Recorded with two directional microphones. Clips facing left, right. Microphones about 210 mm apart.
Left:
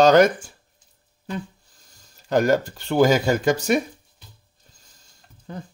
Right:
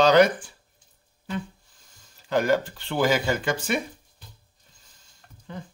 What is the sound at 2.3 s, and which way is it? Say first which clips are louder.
A man's voice: left 3 dB; 45° left (ahead or behind).